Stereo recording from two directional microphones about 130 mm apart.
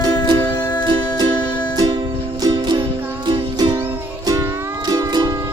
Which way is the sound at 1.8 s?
45° right (ahead or behind).